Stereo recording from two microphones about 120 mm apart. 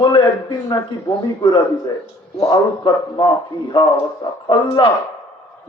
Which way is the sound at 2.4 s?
35° left (ahead or behind).